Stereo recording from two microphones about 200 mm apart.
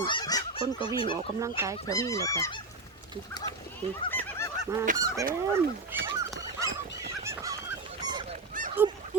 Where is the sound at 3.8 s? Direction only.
30° right (ahead or behind).